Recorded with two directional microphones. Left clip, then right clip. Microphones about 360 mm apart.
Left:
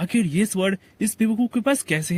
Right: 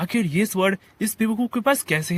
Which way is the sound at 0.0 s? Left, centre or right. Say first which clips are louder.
Even; centre.